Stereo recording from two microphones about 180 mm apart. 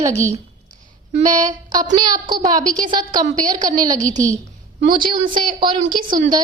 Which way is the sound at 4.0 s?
45° right (ahead or behind).